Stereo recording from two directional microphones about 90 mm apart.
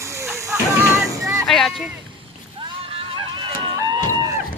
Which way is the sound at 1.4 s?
5° left (ahead or behind).